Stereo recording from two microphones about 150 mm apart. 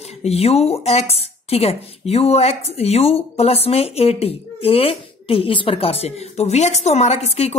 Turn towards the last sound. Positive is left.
turn(degrees=45)  # may be behind; listen again after turning